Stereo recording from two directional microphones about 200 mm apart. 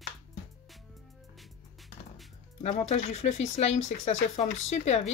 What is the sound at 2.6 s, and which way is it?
Speech, 30° left (ahead or behind).